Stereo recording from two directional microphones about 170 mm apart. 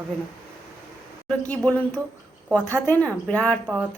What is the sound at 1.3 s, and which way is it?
Speech, 10° left (ahead or behind).